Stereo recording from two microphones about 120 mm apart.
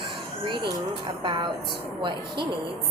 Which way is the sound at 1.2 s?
45° right (ahead or behind).